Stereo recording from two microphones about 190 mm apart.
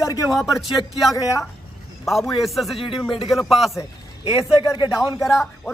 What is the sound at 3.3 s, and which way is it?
Speech, centre (ahead or behind).